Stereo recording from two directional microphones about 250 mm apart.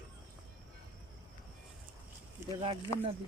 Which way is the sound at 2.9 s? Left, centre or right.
Centre.